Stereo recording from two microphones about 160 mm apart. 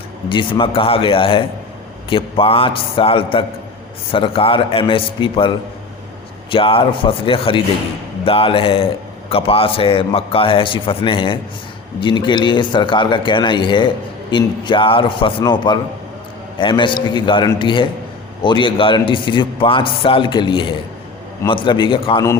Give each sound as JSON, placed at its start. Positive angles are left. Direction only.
{"t": 0.3, "sound": "speech", "side_deg": 30}
{"t": 6.5, "sound": "speech", "side_deg": 35}